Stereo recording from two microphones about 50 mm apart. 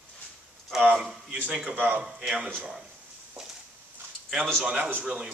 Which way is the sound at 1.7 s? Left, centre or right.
Right.